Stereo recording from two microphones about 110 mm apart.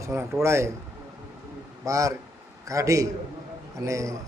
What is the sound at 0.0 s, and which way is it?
Speech, 25° right (ahead or behind).